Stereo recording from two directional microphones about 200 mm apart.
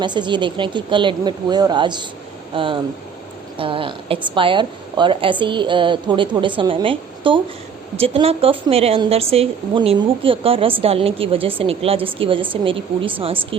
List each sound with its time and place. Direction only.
0.0 s a woman's voice: 20° right (ahead or behind)